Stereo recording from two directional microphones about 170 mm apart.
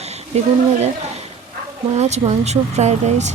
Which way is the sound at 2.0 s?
40° right (ahead or behind).